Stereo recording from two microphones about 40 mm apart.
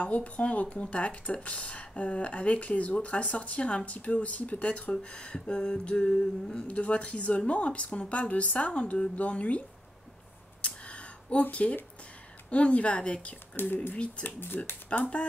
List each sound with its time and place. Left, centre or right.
0.0 s speech: left
10.6 s a sound: left
12.4 s speech: left
14.2 s speech: left
15.0 s speech: left